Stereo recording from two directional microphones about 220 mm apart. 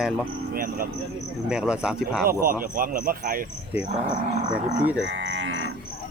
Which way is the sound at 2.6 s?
40° right (ahead or behind).